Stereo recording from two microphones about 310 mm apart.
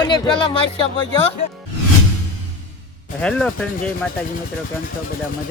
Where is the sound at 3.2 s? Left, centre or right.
Centre.